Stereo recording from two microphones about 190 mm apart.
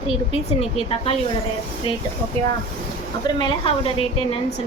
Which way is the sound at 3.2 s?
25° left (ahead or behind).